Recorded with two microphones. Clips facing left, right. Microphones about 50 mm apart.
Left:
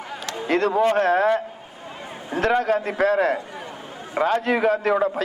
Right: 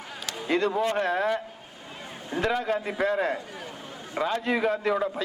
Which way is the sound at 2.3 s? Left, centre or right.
Centre.